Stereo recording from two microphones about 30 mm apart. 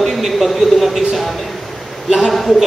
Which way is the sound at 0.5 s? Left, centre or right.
Centre.